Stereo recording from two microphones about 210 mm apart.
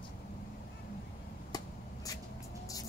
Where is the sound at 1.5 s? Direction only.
15° left (ahead or behind).